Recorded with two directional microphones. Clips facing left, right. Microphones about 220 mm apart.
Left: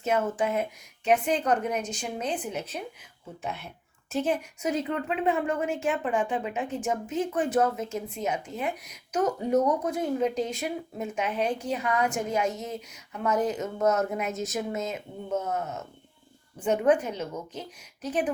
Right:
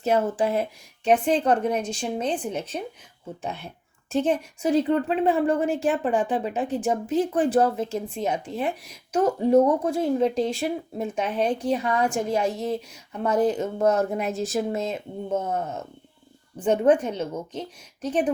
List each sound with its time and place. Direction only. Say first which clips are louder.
0.0 s a woman's voice: right 4 dB; 35° right (ahead or behind)
4.1 s a woman's voice: right 4 dB; 30° right (ahead or behind)